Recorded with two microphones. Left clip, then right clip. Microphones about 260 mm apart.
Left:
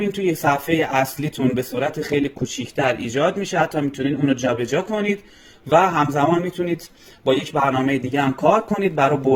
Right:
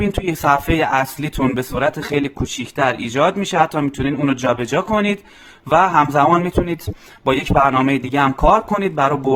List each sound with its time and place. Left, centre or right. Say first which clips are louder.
0.0 s speech: right 1 dB; centre